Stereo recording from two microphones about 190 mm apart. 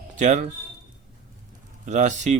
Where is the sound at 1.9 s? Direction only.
40° right (ahead or behind).